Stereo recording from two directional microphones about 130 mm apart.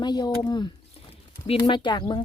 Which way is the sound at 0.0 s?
35° left (ahead or behind).